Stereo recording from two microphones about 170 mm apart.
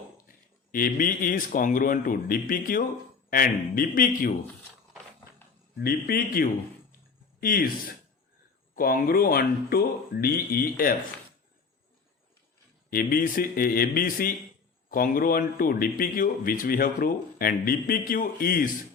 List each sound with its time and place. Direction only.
0.3 s speech: 55° left (ahead or behind)
5.8 s speech: 60° left (ahead or behind)
12.9 s speech: 60° left (ahead or behind)